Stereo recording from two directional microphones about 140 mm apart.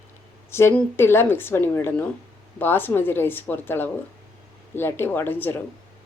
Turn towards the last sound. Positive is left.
turn(degrees=15)  # may be behind; listen again after turning